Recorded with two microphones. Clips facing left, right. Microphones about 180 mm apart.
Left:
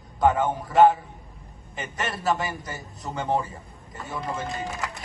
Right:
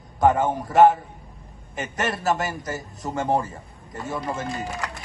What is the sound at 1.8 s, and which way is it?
Speech, centre (ahead or behind).